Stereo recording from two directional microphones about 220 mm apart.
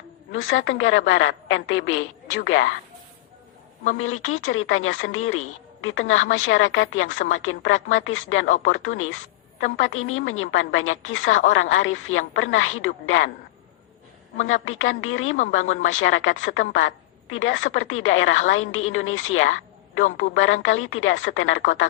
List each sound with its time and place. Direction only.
0.3 s a woman's voice: 60° left (ahead or behind)
3.9 s a woman's voice: 70° left (ahead or behind)
14.4 s a woman's voice: 65° left (ahead or behind)
15.4 s speech: 35° left (ahead or behind)
15.7 s a woman's voice: 60° left (ahead or behind)